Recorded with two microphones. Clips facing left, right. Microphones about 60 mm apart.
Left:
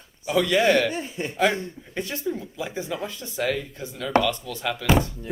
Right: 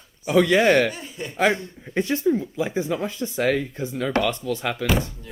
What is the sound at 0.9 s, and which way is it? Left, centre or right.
Speech, left.